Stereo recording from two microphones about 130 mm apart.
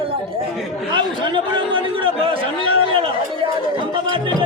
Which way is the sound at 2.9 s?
45° right (ahead or behind).